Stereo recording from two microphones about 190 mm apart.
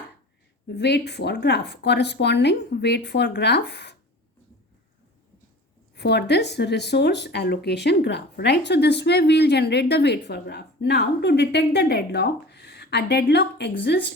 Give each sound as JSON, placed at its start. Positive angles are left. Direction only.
{"t": 0.7, "sound": "speech", "side_deg": 60}
{"t": 6.0, "sound": "speech", "side_deg": 60}